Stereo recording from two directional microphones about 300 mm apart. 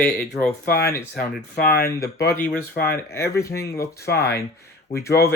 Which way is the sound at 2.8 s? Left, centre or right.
Centre.